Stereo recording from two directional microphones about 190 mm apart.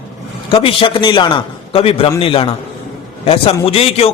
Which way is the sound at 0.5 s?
30° left (ahead or behind).